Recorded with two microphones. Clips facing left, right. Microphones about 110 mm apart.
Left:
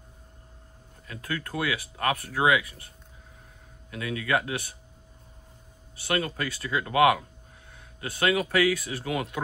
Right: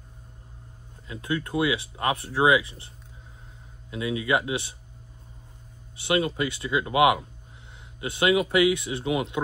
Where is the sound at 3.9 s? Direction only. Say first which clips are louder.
Right 2 dB; 20° right (ahead or behind).